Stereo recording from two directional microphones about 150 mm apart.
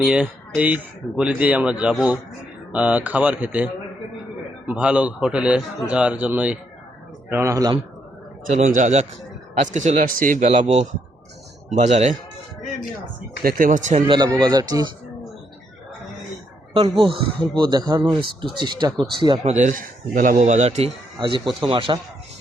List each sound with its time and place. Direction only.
0.0 s a man's voice: 5° right (ahead or behind)
8.4 s speech: 55° right (ahead or behind)
13.4 s speech: 65° right (ahead or behind)
14.1 s speech: 30° right (ahead or behind)
17.1 s speech: 30° right (ahead or behind)
19.4 s speech: 55° right (ahead or behind)
21.2 s speech: 30° right (ahead or behind)